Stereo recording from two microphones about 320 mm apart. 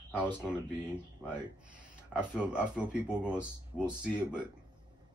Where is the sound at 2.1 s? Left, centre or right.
Centre.